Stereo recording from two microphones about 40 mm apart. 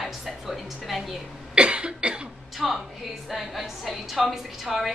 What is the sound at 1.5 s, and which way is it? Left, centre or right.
Cough, right.